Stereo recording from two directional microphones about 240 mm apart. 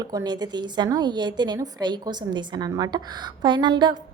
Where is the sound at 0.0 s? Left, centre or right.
Centre.